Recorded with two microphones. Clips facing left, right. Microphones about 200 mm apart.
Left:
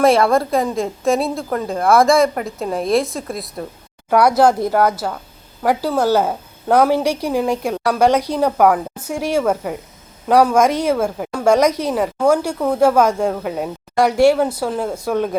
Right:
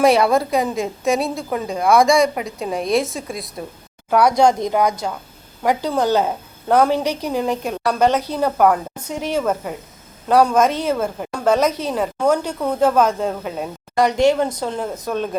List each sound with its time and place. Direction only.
0.0 s a woman's voice: centre (ahead or behind)